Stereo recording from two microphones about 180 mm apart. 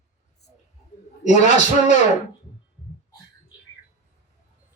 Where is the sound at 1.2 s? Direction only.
40° left (ahead or behind).